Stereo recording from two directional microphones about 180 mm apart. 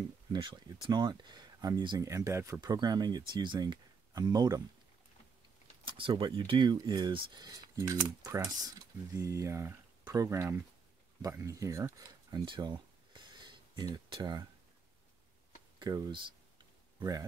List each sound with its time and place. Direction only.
0.3 s speech: 25° right (ahead or behind)
5.9 s speech: 30° right (ahead or behind)
15.8 s speech: 20° right (ahead or behind)